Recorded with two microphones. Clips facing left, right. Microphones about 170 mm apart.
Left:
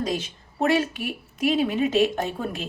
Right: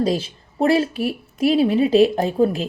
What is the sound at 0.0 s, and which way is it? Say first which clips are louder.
A woman's voice: right 7 dB; 30° right (ahead or behind).